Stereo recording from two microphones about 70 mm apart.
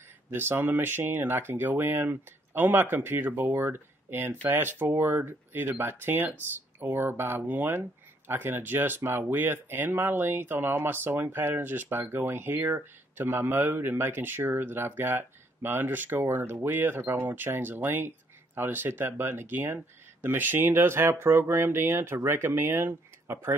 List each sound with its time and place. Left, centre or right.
0.3 s speech: right